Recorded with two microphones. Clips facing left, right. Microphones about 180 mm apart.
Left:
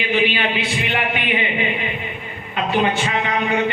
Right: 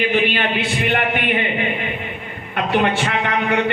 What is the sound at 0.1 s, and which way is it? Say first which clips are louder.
A man's voice: right 1 dB; 55° right (ahead or behind).